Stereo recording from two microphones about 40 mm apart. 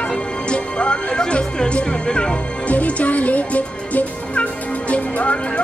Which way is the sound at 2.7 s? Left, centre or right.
Left.